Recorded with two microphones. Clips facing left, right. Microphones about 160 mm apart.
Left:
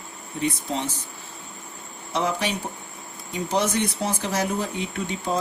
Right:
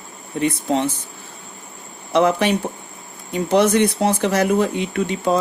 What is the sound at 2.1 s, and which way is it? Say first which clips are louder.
Speech: right 9 dB; 65° right (ahead or behind).